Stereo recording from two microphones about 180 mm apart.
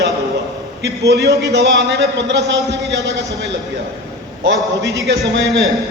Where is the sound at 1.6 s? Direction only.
70° right (ahead or behind).